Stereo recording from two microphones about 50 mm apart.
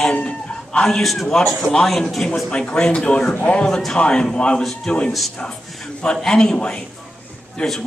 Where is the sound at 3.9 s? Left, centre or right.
Centre.